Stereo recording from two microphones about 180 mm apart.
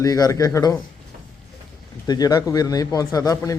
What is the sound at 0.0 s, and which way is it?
Speech, 20° left (ahead or behind).